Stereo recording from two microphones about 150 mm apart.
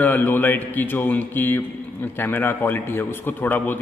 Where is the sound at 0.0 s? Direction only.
10° left (ahead or behind).